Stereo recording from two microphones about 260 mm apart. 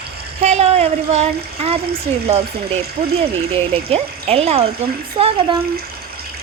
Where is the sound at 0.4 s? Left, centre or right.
Right.